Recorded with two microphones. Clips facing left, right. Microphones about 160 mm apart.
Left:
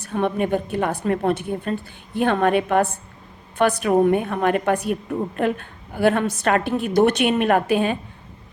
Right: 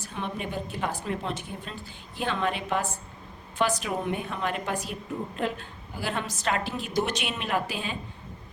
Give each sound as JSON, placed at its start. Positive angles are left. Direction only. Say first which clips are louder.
{"t": 0.0, "sound": "a woman's voice", "louder": "left 12 dB", "side_deg": 55}